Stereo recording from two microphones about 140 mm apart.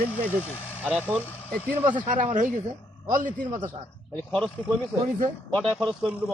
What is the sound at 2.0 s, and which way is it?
Speech, 65° right (ahead or behind).